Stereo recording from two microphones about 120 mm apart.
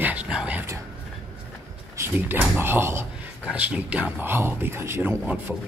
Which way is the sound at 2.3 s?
15° right (ahead or behind).